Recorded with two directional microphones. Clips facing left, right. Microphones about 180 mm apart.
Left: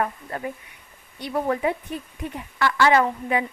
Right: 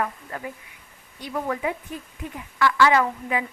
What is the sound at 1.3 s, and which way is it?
A woman's voice, 30° left (ahead or behind).